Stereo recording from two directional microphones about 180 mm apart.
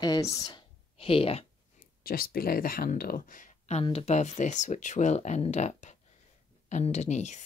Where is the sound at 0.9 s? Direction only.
30° left (ahead or behind).